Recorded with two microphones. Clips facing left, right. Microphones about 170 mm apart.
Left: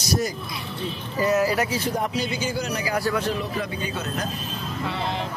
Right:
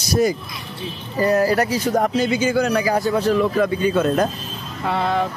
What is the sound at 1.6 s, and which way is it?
Speech, 45° right (ahead or behind).